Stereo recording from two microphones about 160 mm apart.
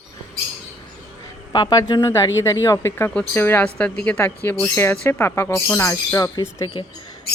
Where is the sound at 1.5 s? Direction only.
25° left (ahead or behind).